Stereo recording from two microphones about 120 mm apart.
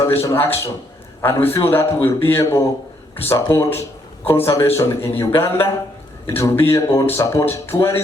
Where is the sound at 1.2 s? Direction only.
20° left (ahead or behind).